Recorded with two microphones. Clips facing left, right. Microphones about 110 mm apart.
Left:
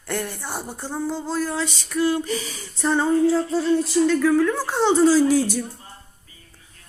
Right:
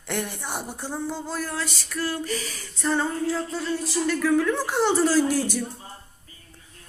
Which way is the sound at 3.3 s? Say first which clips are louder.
Left 7 dB; 35° left (ahead or behind).